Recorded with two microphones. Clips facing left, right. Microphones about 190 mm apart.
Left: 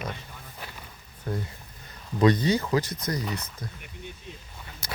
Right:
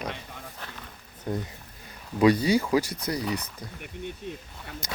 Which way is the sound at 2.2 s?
10° right (ahead or behind).